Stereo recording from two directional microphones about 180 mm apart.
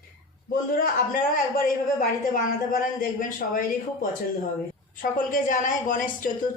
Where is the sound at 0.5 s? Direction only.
50° left (ahead or behind).